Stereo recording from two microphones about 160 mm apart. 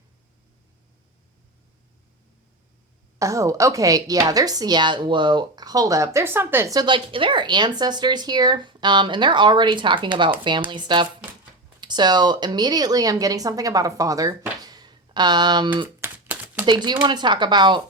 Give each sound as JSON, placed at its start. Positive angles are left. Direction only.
{"t": 3.2, "sound": "a woman's voice", "side_deg": -20}
{"t": 14.6, "sound": "a sound", "side_deg": -25}
{"t": 16.0, "sound": "typing", "side_deg": -10}
{"t": 16.6, "sound": "a woman's voice", "side_deg": -25}